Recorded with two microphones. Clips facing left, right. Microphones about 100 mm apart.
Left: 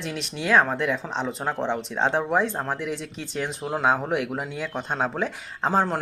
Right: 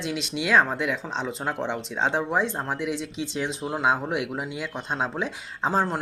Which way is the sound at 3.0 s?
50° left (ahead or behind).